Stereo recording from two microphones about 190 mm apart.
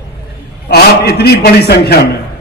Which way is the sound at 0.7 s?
60° left (ahead or behind).